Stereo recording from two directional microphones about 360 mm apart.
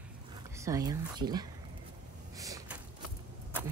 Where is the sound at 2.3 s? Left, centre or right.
Centre.